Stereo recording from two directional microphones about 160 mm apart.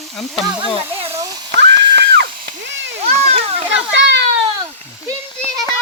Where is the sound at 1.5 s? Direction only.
90° right.